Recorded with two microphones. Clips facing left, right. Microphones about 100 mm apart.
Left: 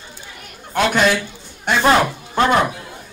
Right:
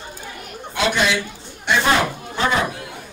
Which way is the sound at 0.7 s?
50° left (ahead or behind).